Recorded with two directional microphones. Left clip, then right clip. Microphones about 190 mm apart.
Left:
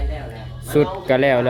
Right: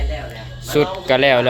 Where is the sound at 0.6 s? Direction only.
15° left (ahead or behind).